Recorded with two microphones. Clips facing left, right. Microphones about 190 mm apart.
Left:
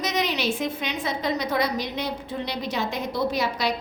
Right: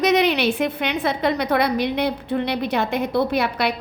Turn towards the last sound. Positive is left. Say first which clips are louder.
# right 3 dB
turn(degrees=-60)  # may be behind; listen again after turning